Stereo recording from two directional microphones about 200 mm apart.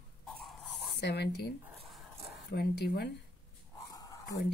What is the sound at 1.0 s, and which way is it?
Speech, 55° left (ahead or behind).